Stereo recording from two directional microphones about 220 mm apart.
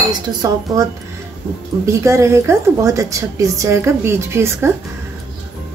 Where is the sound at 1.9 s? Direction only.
15° right (ahead or behind).